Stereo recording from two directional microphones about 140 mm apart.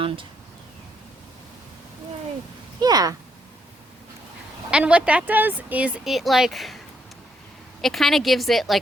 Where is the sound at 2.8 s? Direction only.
30° right (ahead or behind).